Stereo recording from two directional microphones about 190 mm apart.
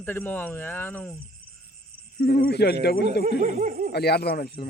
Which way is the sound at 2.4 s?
60° left (ahead or behind).